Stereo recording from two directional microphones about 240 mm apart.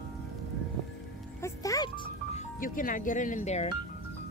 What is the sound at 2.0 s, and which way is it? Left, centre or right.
Music, left.